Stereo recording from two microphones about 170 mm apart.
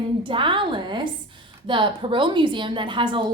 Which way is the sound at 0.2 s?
30° right (ahead or behind).